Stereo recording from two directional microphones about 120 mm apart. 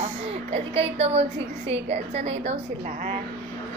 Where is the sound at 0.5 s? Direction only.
60° right (ahead or behind).